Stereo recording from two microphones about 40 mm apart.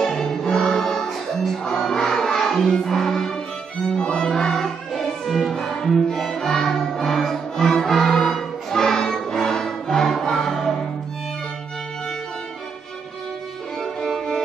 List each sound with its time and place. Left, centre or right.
0.0 s music: centre
3.9 s violin: centre
4.6 s music: centre
13.7 s music: centre